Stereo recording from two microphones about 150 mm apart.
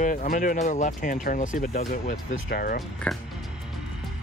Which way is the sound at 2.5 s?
80° left.